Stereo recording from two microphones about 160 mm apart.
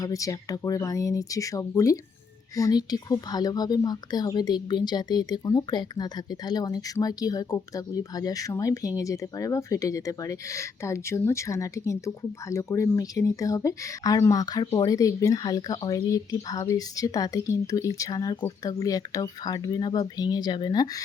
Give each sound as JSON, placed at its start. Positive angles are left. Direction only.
{"t": 0.0, "sound": "speech", "side_deg": 20}